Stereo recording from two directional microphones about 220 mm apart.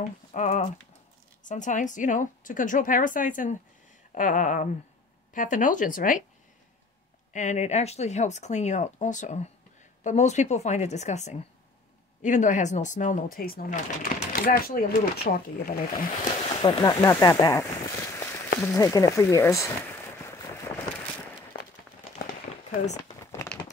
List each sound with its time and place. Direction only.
0.3 s speech: 35° left (ahead or behind)
7.3 s speech: 30° left (ahead or behind)
16.6 s speech: 15° left (ahead or behind)
18.6 s a sound: 15° left (ahead or behind)
22.2 s firecracker: 40° left (ahead or behind)